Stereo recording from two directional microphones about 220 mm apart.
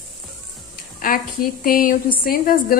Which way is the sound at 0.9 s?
40° left (ahead or behind).